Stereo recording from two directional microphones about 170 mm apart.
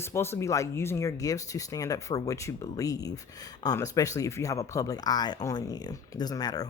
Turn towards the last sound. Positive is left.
turn(degrees=20)  # may be behind; listen again after turning